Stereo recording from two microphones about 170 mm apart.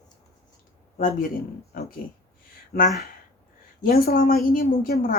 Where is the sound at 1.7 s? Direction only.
60° left (ahead or behind).